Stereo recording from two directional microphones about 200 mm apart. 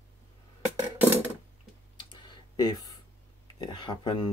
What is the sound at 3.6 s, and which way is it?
Speech, 20° left (ahead or behind).